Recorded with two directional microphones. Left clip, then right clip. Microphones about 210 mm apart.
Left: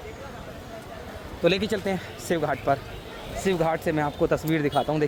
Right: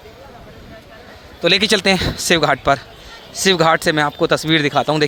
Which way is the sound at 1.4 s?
10° right (ahead or behind).